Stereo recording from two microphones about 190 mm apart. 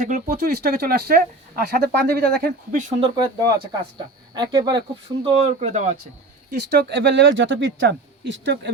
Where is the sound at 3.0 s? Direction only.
25° right (ahead or behind); by 6.0 s 40° right (ahead or behind).